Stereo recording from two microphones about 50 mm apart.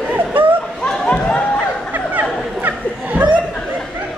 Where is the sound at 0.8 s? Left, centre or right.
Centre.